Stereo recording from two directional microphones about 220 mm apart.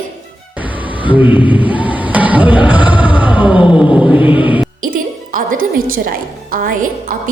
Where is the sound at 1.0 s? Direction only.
5° right (ahead or behind).